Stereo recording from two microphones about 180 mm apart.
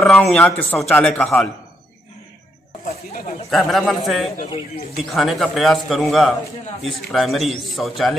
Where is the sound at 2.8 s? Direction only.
50° left (ahead or behind).